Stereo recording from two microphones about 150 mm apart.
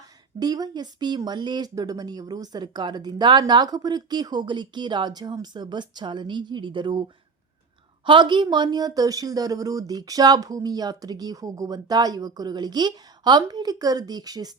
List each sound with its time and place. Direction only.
0.3 s speech: 25° right (ahead or behind)
8.0 s speech: 30° right (ahead or behind)